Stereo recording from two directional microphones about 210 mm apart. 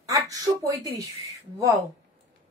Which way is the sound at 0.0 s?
15° right (ahead or behind).